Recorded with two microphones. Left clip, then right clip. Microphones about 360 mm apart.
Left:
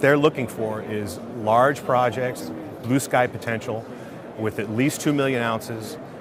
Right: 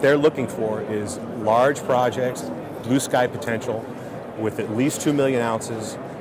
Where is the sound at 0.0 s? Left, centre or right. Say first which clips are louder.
Right 1 dB; left.